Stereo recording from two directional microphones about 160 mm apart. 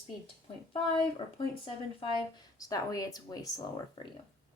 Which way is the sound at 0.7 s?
35° left (ahead or behind).